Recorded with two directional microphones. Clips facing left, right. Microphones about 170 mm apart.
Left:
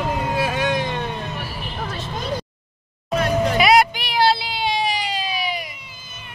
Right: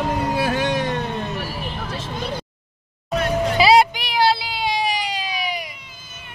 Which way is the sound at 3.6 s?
30° right (ahead or behind).